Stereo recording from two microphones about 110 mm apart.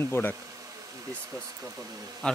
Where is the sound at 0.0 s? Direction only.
20° left (ahead or behind).